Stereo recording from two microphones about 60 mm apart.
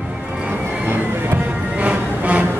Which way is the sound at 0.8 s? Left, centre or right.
Right.